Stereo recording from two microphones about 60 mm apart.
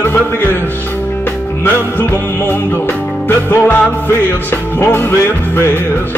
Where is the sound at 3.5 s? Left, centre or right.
Left.